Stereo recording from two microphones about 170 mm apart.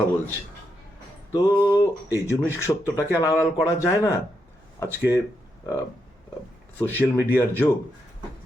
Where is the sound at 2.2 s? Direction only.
15° left (ahead or behind).